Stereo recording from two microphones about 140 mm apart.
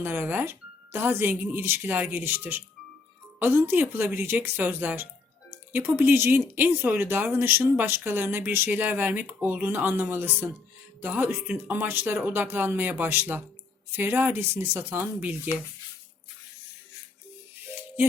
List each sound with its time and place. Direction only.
0.0 s speech: 15° right (ahead or behind)